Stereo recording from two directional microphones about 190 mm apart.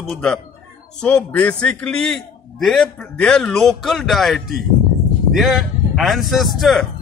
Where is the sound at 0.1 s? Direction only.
5° left (ahead or behind).